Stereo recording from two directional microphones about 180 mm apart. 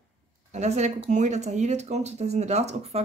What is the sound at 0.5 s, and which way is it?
Speech, 40° right (ahead or behind).